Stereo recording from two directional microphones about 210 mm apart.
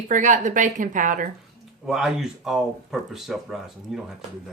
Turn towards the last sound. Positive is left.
turn(degrees=0)  # may be behind; listen again after turning